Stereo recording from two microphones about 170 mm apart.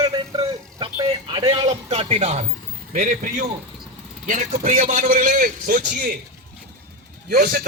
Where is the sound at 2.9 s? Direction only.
50° right (ahead or behind).